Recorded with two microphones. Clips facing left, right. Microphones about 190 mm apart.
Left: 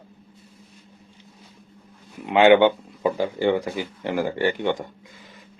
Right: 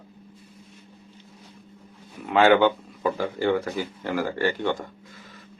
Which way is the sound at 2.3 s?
20° left (ahead or behind).